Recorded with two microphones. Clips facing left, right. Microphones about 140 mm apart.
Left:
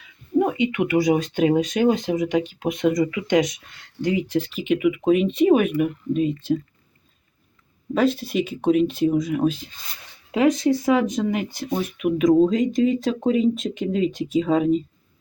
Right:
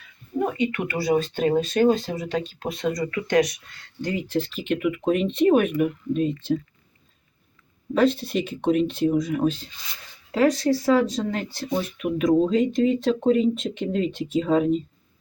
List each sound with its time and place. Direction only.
0.3 s speech: 15° left (ahead or behind)
7.9 s speech: 5° left (ahead or behind)
10.3 s speech: 20° left (ahead or behind)
11.9 s speech: 5° left (ahead or behind)